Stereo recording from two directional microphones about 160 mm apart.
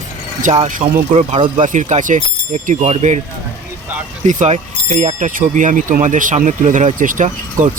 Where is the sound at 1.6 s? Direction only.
50° right (ahead or behind).